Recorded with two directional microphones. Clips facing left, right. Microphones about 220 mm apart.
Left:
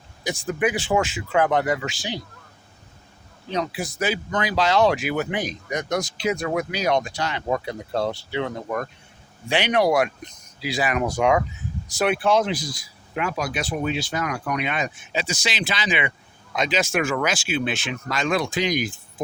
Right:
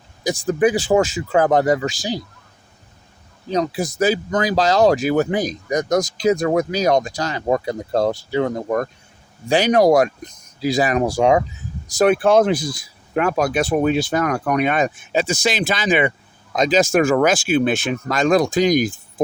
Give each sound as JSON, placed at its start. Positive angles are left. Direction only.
{"t": 0.3, "sound": "speech", "side_deg": -35}
{"t": 3.5, "sound": "speech", "side_deg": -40}
{"t": 11.9, "sound": "speech", "side_deg": -45}